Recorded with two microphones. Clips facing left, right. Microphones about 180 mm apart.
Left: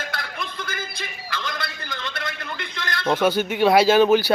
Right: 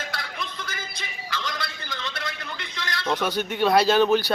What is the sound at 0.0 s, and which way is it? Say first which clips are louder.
Music: left 2 dB; 55° left (ahead or behind).